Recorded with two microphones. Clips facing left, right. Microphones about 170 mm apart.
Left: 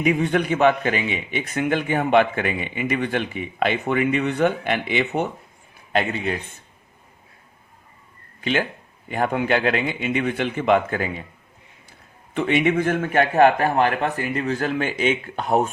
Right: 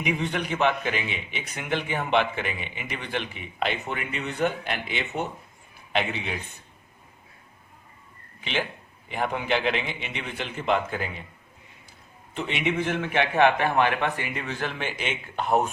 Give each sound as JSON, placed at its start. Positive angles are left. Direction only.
{"t": 0.0, "sound": "a man's voice", "side_deg": 50}
{"t": 5.9, "sound": "a man's voice", "side_deg": 45}
{"t": 9.1, "sound": "a man's voice", "side_deg": 50}
{"t": 12.3, "sound": "a man's voice", "side_deg": 55}